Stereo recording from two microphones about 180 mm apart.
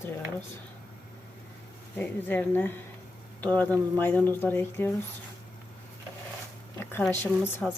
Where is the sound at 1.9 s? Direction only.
10° left (ahead or behind).